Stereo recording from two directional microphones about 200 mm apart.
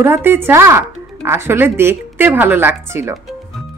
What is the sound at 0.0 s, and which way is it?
Speech, 10° right (ahead or behind).